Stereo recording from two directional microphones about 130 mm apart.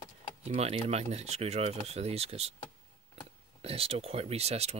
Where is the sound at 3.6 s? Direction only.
50° right (ahead or behind).